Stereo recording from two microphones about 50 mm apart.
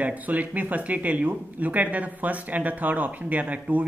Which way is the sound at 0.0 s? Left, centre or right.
Right.